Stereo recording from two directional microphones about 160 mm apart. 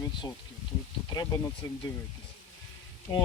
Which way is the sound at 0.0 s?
25° left (ahead or behind).